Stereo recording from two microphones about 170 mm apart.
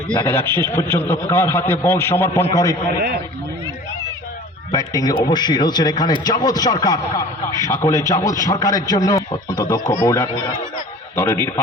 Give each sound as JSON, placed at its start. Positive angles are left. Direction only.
{"t": 0.2, "sound": "a man's voice", "side_deg": 15}
{"t": 4.7, "sound": "a man's voice", "side_deg": 20}